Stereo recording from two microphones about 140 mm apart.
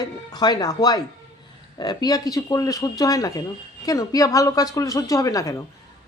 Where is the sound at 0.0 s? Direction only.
30° left (ahead or behind).